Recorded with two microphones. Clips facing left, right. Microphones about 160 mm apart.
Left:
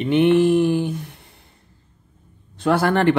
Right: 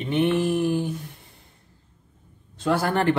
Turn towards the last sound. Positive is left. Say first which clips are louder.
# left 5 dB
turn(degrees=80)